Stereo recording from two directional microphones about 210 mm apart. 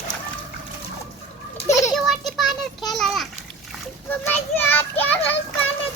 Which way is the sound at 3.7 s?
10° left (ahead or behind).